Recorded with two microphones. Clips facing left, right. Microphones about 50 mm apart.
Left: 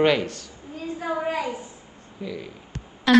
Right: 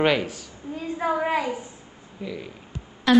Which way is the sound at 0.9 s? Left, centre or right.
Right.